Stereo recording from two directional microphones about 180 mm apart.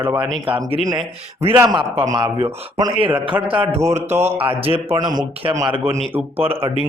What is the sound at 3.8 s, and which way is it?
Speech, 15° right (ahead or behind).